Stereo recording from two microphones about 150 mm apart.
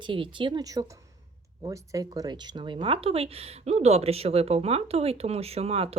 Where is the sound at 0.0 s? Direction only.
35° right (ahead or behind).